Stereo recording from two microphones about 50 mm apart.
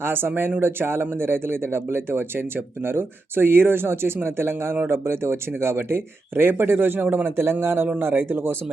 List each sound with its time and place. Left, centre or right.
0.0 s speech: right